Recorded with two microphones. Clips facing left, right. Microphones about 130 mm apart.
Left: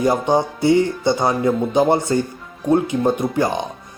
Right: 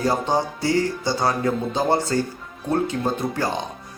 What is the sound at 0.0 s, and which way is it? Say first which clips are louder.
A man's voice: left 4 dB; 20° left (ahead or behind).